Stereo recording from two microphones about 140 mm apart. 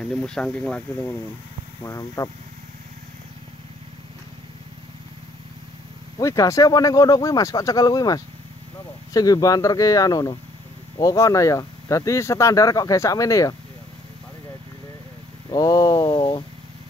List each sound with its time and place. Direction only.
0.0 s speech: 5° left (ahead or behind)
1.8 s speech: 25° left (ahead or behind)
6.1 s speech: 25° left (ahead or behind)
15.5 s speech: 30° left (ahead or behind)